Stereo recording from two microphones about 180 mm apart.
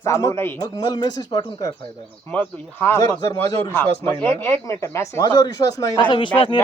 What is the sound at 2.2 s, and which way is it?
A man's voice, 10° left (ahead or behind).